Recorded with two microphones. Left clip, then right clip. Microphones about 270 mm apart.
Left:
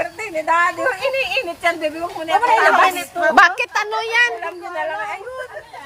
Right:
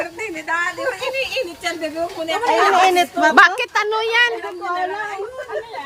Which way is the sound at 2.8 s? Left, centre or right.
Right.